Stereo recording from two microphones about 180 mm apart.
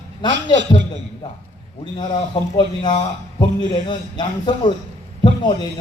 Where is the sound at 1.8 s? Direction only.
25° left (ahead or behind).